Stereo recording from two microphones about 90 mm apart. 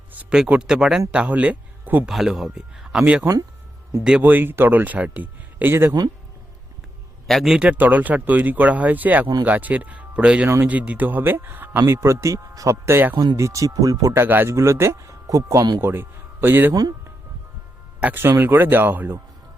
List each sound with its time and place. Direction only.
0.1 s speech: 15° right (ahead or behind)
2.0 s speech: 5° right (ahead or behind); by 5.9 s 25° right (ahead or behind)
7.3 s speech: centre (ahead or behind)
7.7 s speech: 20° right (ahead or behind); by 14.1 s 40° right (ahead or behind)
14.1 s speech: 25° right (ahead or behind)
18.0 s speech: 25° right (ahead or behind)